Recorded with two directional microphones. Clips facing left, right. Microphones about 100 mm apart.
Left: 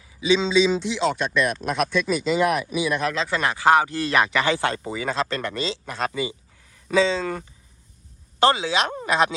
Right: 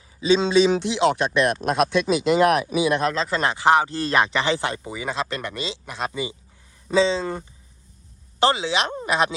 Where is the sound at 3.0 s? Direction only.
35° right (ahead or behind).